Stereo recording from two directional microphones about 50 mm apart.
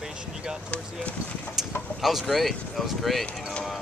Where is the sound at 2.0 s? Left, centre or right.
Centre.